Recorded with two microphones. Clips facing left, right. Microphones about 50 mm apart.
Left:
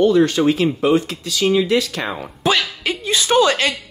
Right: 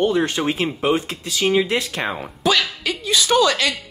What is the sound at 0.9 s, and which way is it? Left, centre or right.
Speech, right.